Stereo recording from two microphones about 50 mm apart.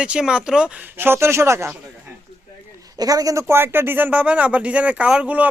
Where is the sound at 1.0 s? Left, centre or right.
Right.